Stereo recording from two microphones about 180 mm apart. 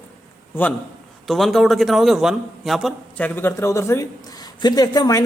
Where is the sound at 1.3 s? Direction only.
Centre (ahead or behind).